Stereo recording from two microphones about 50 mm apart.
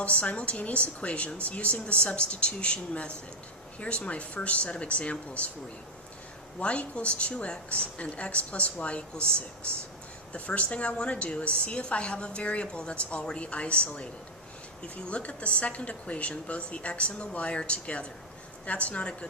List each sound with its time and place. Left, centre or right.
0.0 s a woman's voice: left
6.6 s a woman's voice: left